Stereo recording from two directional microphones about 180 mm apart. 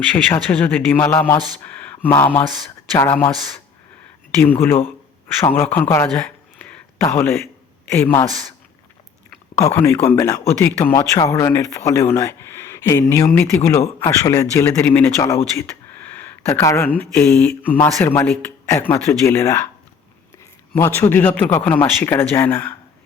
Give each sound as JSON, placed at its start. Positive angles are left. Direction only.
{"t": 0.3, "sound": "speech", "side_deg": 10}
{"t": 5.4, "sound": "speech", "side_deg": 10}
{"t": 9.6, "sound": "speech", "side_deg": 15}
{"t": 20.7, "sound": "speech", "side_deg": 15}